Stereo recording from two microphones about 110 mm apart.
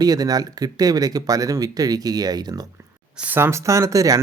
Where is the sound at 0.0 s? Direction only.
35° right (ahead or behind).